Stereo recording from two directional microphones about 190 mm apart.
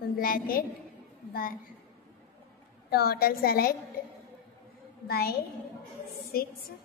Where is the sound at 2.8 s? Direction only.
55° left (ahead or behind).